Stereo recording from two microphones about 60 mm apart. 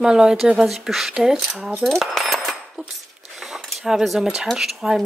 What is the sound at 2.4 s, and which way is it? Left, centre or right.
Speech, centre.